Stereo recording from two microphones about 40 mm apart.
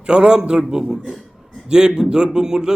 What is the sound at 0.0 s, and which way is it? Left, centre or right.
A man's voice, right.